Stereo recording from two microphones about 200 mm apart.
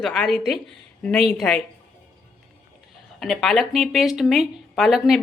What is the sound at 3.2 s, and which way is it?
Speech, centre (ahead or behind).